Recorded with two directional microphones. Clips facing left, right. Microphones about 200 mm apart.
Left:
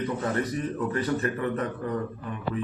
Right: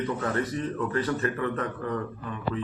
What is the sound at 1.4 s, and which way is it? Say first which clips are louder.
Speech: left 1 dB; 20° left (ahead or behind).